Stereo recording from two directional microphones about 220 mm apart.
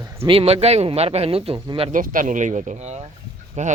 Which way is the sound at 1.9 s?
35° right (ahead or behind).